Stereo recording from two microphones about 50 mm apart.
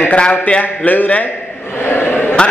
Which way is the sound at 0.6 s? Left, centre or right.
Left.